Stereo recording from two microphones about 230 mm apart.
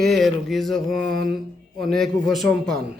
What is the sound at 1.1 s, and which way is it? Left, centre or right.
Mantra, right.